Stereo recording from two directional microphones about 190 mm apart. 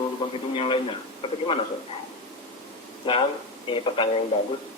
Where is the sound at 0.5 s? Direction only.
25° left (ahead or behind).